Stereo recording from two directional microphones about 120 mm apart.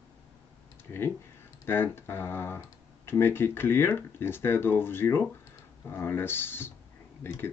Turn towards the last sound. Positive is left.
turn(degrees=20)  # may be behind; listen again after turning